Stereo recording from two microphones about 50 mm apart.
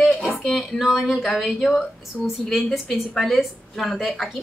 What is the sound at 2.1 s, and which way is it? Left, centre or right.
Speech, left.